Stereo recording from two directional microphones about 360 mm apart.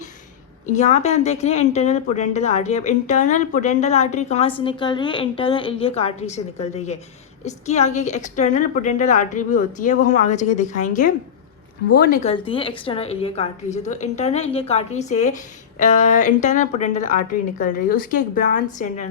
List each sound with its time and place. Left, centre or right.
0.7 s a woman's voice: centre